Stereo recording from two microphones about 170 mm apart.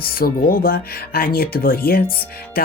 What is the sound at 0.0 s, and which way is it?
Speech, 60° left (ahead or behind).